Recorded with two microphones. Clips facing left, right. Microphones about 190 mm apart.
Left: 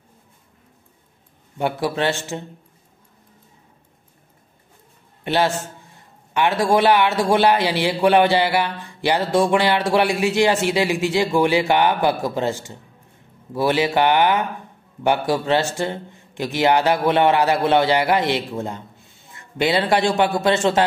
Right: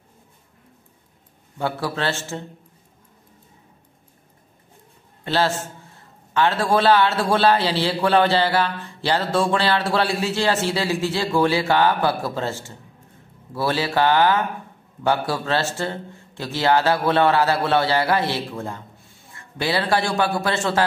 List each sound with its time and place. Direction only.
1.6 s a man's voice: 20° left (ahead or behind)
5.2 s a man's voice: 15° left (ahead or behind)